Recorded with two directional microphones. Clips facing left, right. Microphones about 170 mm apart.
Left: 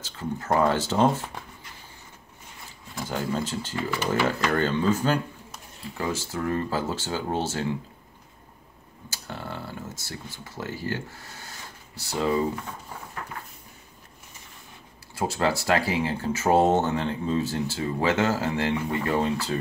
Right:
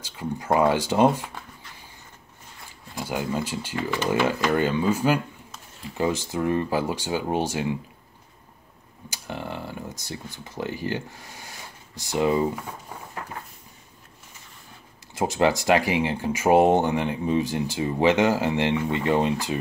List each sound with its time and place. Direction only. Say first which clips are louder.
0.0 s speech: right 1 dB; 15° right (ahead or behind)
3.0 s speech: right 1 dB; 10° right (ahead or behind)
9.1 s speech: right 3 dB; 15° right (ahead or behind)
15.1 s speech: right 4 dB; 20° right (ahead or behind)